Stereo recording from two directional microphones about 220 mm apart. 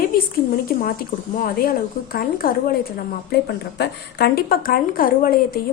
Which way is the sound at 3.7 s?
45° left (ahead or behind).